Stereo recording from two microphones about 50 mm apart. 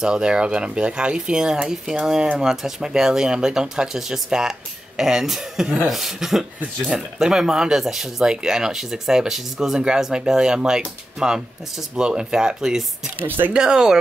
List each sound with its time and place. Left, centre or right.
0.0 s speech: centre